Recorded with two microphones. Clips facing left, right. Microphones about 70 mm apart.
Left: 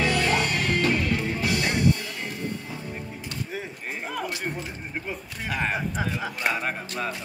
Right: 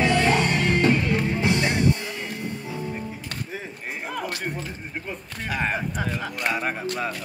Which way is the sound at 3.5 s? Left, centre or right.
Centre.